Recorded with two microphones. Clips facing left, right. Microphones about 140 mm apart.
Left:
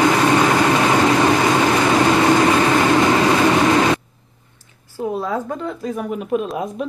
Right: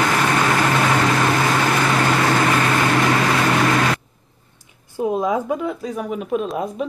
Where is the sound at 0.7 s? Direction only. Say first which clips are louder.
Left 3 dB; 15° left (ahead or behind).